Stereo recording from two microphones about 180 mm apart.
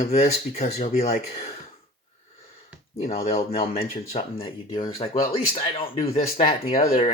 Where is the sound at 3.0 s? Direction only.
35° left (ahead or behind).